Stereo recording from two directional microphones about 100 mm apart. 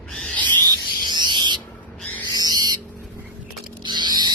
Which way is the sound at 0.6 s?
45° right (ahead or behind).